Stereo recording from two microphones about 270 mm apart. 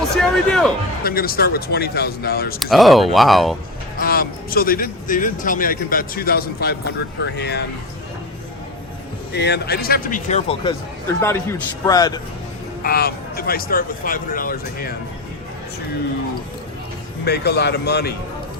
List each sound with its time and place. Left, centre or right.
0.2 s speech: centre
1.0 s speech: left
2.6 s speech: centre
4.0 s speech: left
9.3 s speech: left; by 10.8 s centre
11.2 s a man's voice: centre
12.8 s speech: left
17.2 s speech: left